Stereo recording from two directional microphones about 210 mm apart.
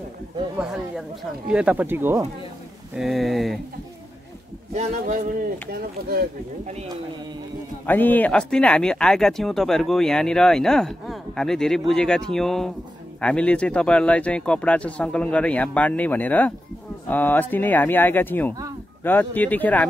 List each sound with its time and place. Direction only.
0.6 s speech: centre (ahead or behind)
4.7 s speech: 40° right (ahead or behind)
7.8 s speech: 10° left (ahead or behind)